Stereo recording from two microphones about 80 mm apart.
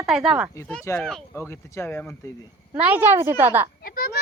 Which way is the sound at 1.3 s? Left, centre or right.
Left.